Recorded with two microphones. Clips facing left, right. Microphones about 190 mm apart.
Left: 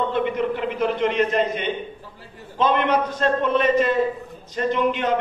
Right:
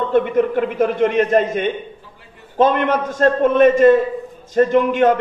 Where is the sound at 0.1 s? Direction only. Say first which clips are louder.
Right 7 dB; 50° right (ahead or behind).